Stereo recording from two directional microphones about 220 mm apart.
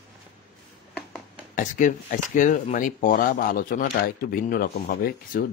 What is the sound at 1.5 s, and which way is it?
Speech, 35° left (ahead or behind).